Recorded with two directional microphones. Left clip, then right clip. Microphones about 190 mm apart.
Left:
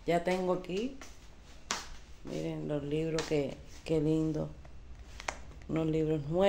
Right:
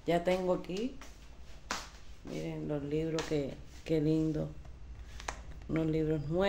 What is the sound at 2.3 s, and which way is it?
Speech, 15° left (ahead or behind).